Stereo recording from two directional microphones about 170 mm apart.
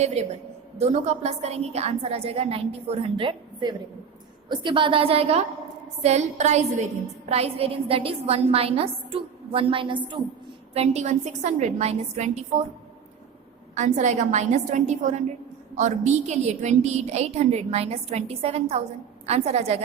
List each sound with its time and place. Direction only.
0.0 s a woman's voice: 40° right (ahead or behind)
10.8 s a woman's voice: 40° right (ahead or behind)
13.7 s a woman's voice: 45° right (ahead or behind)